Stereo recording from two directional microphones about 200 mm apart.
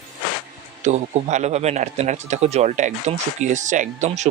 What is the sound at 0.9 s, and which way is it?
Speech, 35° right (ahead or behind).